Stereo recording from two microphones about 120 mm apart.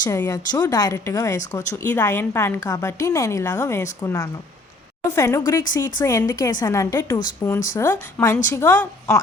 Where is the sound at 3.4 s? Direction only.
15° left (ahead or behind).